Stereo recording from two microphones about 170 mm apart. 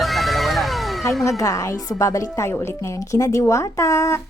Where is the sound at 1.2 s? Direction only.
20° left (ahead or behind).